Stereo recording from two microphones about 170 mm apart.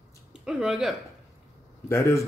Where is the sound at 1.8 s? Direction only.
15° left (ahead or behind).